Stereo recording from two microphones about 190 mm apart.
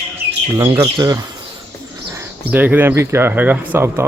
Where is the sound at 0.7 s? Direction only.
20° right (ahead or behind).